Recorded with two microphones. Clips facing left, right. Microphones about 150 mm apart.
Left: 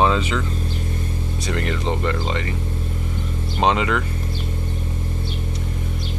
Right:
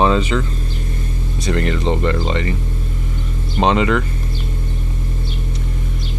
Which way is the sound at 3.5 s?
5° left (ahead or behind).